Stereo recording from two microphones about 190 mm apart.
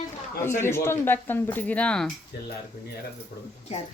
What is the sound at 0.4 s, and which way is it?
Speech, 15° left (ahead or behind).